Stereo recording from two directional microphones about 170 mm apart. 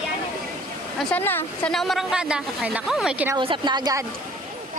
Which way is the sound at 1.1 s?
10° left (ahead or behind).